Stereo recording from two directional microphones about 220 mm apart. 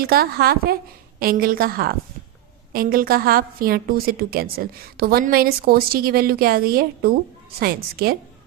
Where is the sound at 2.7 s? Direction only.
40° right (ahead or behind).